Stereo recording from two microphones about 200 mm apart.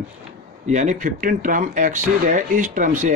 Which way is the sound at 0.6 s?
35° right (ahead or behind).